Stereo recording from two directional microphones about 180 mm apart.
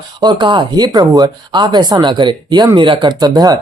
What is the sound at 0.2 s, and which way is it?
Speech, 25° right (ahead or behind).